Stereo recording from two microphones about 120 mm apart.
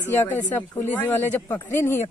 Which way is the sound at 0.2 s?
15° left (ahead or behind).